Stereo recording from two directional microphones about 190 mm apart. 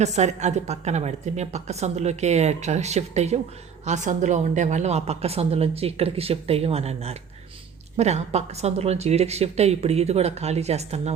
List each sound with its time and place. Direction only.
0.0 s a woman's voice: 35° right (ahead or behind)